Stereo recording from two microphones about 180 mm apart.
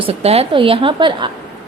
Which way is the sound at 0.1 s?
35° right (ahead or behind).